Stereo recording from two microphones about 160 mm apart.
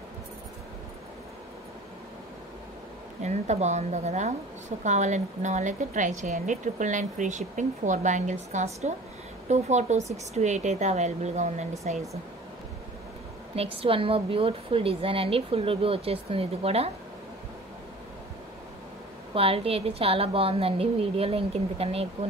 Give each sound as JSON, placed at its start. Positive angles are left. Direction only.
{"t": 3.2, "sound": "a woman's voice", "side_deg": -45}
{"t": 13.6, "sound": "a woman's voice", "side_deg": -35}
{"t": 19.3, "sound": "a woman's voice", "side_deg": -35}